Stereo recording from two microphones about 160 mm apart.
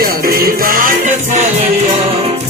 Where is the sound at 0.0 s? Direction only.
65° right (ahead or behind).